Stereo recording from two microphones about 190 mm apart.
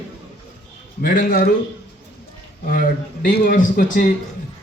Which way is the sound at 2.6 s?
45° left (ahead or behind).